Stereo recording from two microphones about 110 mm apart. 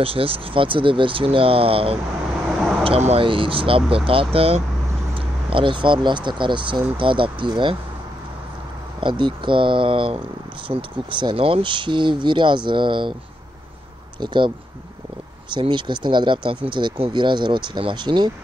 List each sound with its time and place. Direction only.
0.0 s speech: 55° right (ahead or behind)
3.3 s speech: 55° right (ahead or behind)
5.1 s speech: 50° right (ahead or behind)
9.2 s speech: 50° right (ahead or behind)
14.2 s speech: 45° right (ahead or behind)
15.5 s speech: 45° right (ahead or behind)